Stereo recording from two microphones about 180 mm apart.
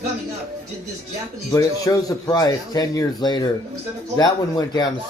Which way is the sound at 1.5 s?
20° left (ahead or behind).